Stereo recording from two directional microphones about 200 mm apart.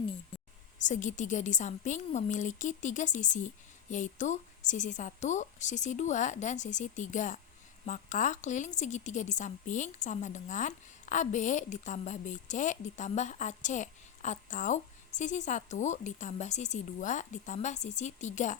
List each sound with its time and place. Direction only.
0.8 s a woman's voice: 40° left (ahead or behind)